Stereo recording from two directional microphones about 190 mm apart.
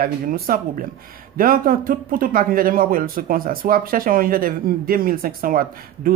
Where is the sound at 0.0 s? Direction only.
50° right (ahead or behind).